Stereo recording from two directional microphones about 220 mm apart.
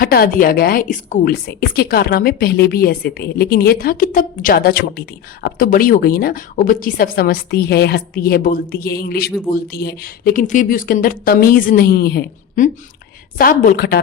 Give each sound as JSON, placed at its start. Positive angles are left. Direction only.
{"t": 0.0, "sound": "a woman's voice", "side_deg": 45}